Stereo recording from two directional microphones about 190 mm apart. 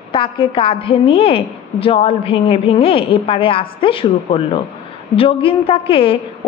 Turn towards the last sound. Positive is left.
turn(degrees=30)  # may be behind; listen again after turning